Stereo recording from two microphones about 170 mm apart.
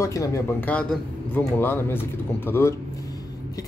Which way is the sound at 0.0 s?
20° left (ahead or behind).